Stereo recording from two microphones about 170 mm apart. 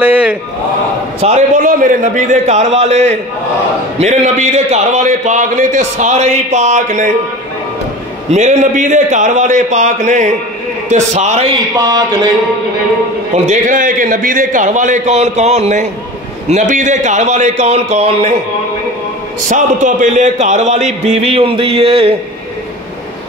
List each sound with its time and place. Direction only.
0.0 s a sound: 10° right (ahead or behind)
1.2 s a man's voice: 45° right (ahead or behind)
8.3 s a man's voice: 45° right (ahead or behind)
11.7 s a sound: 20° right (ahead or behind)
13.3 s a man's voice: 45° right (ahead or behind)
19.5 s a man's voice: 50° right (ahead or behind)